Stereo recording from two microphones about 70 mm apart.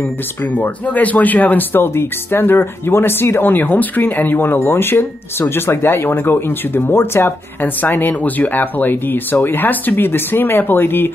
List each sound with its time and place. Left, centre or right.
0.6 s speech: left